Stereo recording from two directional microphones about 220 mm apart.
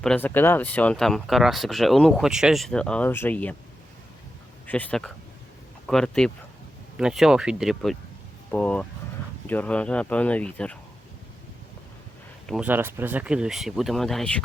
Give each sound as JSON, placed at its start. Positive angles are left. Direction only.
{"t": 0.0, "sound": "speech", "side_deg": 5}
{"t": 4.6, "sound": "speech", "side_deg": 5}
{"t": 12.5, "sound": "speech", "side_deg": -5}